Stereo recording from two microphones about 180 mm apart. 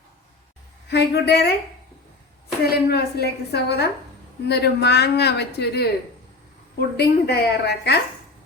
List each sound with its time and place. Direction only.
0.9 s a woman's voice: 70° left (ahead or behind)
2.9 s a woman's voice: 65° left (ahead or behind)